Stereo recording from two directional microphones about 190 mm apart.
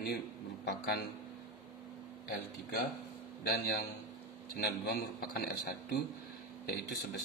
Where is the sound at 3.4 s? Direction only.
55° left (ahead or behind).